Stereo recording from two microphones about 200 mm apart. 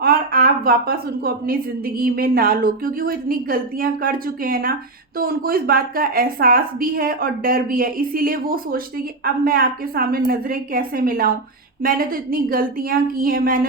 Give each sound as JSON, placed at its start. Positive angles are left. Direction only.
{"t": 0.0, "sound": "a woman's voice", "side_deg": -50}